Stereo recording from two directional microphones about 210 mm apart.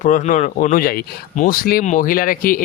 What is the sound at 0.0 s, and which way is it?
Speech, 35° left (ahead or behind).